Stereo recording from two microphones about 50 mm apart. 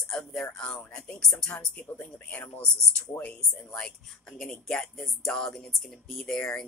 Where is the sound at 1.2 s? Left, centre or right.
Centre.